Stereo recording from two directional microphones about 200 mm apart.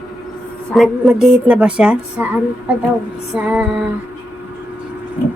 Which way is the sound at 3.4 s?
5° right (ahead or behind).